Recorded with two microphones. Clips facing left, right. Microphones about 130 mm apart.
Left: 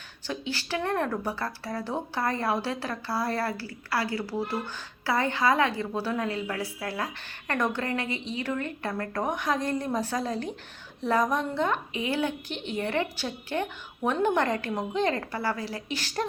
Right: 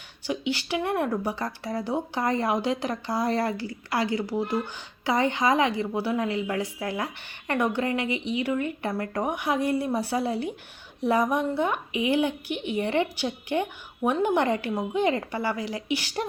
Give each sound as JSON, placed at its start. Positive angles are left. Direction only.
{"t": 0.3, "sound": "speech", "side_deg": -15}